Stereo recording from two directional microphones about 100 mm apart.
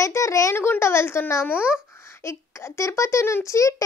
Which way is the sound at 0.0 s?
30° left (ahead or behind).